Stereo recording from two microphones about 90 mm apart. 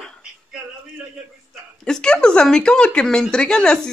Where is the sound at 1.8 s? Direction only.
10° left (ahead or behind).